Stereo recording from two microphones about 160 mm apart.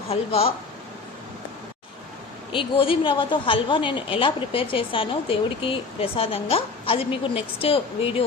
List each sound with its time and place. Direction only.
0.1 s speech: 40° left (ahead or behind)
2.5 s speech: 35° left (ahead or behind)